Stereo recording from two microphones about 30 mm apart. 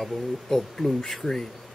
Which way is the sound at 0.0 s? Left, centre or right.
Centre.